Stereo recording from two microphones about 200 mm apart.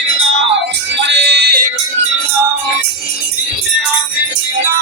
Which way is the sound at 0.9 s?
60° right (ahead or behind).